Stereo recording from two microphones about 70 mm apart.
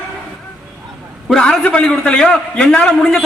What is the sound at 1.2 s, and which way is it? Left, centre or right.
A man's voice, centre.